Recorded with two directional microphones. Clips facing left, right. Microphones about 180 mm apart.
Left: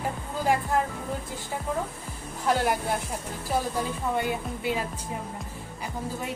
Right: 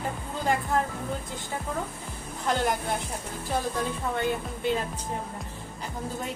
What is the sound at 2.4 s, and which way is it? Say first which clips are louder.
Speech: left 2 dB; 5° left (ahead or behind).